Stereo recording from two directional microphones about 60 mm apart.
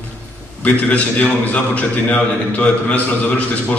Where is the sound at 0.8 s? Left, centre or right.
Left.